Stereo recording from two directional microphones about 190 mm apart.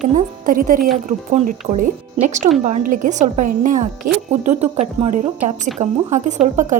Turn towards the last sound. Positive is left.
turn(degrees=-40)  # may be behind; listen again after turning